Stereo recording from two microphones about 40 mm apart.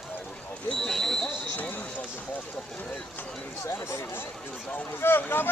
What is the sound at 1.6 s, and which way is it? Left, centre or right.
Run, left.